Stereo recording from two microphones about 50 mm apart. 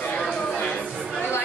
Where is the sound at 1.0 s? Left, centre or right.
Centre.